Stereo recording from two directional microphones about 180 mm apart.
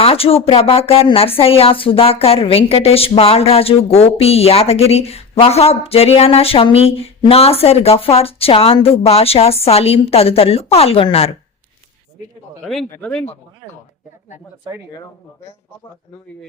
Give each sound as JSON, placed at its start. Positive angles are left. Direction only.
{"t": 0.0, "sound": "speech", "side_deg": 30}
{"t": 12.9, "sound": "speech", "side_deg": 5}